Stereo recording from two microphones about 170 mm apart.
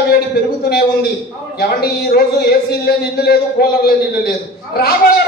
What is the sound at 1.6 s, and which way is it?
A man's voice, 70° left (ahead or behind).